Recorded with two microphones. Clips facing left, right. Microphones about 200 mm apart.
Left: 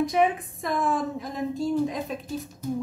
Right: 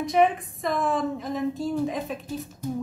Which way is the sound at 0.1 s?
Centre (ahead or behind).